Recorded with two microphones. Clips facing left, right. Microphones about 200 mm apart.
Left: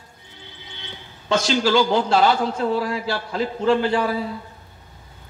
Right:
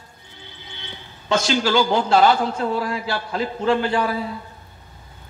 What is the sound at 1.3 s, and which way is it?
A man's voice, 50° right (ahead or behind).